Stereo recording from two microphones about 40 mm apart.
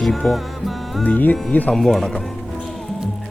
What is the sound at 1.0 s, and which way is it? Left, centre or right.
Speech, left.